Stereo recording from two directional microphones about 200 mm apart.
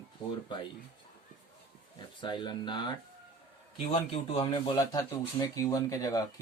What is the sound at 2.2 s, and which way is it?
Speech, 20° left (ahead or behind).